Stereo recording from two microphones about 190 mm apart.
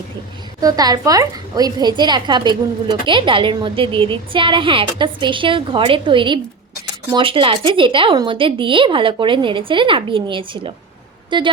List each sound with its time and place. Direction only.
0.6 s a woman's voice: 20° right (ahead or behind)